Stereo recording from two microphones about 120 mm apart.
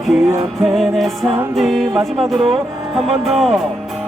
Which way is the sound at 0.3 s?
20° right (ahead or behind).